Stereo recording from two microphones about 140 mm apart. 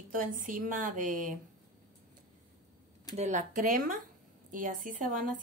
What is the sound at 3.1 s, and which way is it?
A woman's voice, 55° right (ahead or behind).